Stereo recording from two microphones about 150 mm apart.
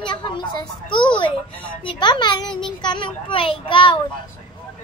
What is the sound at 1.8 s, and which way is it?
A child's voice, 30° left (ahead or behind).